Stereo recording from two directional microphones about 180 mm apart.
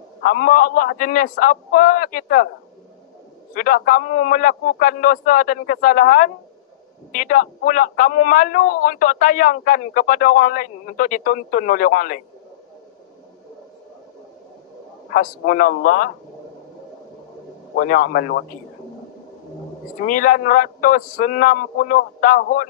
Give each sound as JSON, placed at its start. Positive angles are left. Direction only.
{"t": 0.2, "sound": "a man's voice", "side_deg": 50}
{"t": 3.5, "sound": "a man's voice", "side_deg": 50}
{"t": 15.1, "sound": "a man's voice", "side_deg": 50}
{"t": 17.7, "sound": "a man's voice", "side_deg": 50}
{"t": 20.1, "sound": "a man's voice", "side_deg": 50}